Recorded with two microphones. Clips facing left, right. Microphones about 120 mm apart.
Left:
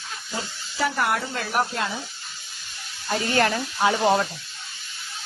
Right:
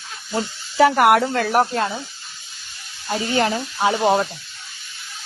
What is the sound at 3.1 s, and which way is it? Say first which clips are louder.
Speech: right 2 dB; 20° right (ahead or behind).